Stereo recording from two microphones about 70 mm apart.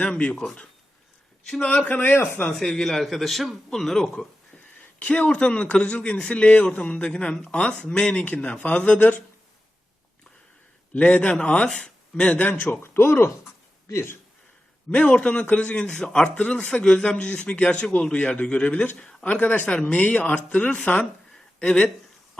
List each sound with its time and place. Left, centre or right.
0.0 s a man's voice: centre
1.6 s speech: centre
2.4 s speech: centre
5.0 s a man's voice: centre
10.9 s a man's voice: centre
12.8 s speech: left
14.8 s a man's voice: centre